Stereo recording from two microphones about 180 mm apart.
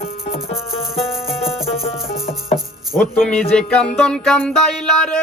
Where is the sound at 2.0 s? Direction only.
55° left (ahead or behind).